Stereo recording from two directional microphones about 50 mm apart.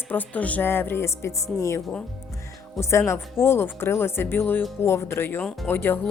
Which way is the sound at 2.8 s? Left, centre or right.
Left.